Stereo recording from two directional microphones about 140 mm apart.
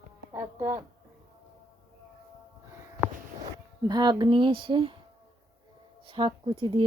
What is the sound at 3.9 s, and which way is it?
Speech, 30° right (ahead or behind).